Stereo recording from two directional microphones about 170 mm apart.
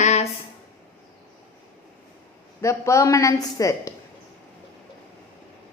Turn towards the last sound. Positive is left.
turn(degrees=20)  # may be behind; listen again after turning